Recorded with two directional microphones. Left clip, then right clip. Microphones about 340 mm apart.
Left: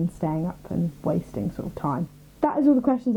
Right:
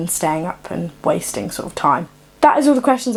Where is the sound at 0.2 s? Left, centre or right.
Centre.